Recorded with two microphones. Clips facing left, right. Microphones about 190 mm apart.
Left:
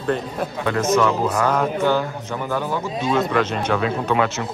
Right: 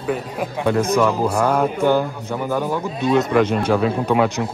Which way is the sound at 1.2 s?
10° right (ahead or behind).